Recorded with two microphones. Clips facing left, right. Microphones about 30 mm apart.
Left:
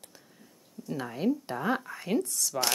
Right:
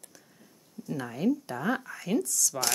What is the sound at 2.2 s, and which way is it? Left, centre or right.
Speech, left.